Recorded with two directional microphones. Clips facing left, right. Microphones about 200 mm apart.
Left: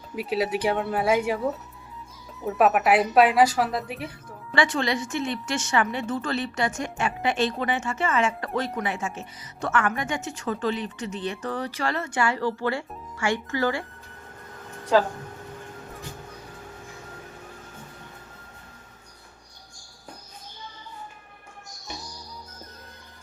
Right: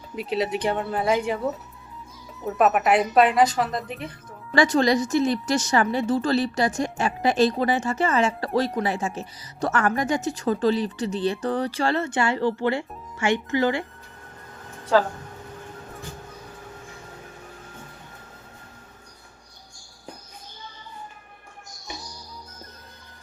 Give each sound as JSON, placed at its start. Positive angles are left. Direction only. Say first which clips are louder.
{"t": 0.2, "sound": "speech", "louder": "even", "side_deg": 5}
{"t": 4.5, "sound": "a woman's voice", "louder": "right 5 dB", "side_deg": -40}